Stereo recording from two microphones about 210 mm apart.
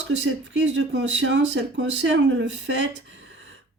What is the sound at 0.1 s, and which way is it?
A woman's voice, 60° right (ahead or behind).